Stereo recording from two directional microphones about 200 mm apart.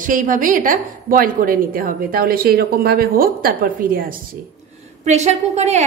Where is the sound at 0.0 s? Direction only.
40° right (ahead or behind).